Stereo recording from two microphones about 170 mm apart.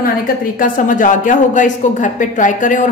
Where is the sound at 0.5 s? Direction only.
55° left (ahead or behind).